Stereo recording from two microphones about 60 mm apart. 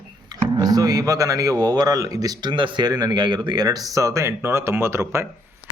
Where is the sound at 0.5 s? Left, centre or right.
Right.